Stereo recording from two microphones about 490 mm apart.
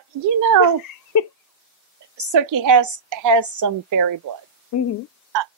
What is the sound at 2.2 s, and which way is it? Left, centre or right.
A woman's voice, right.